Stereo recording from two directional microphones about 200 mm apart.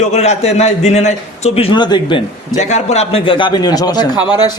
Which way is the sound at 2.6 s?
35° left (ahead or behind).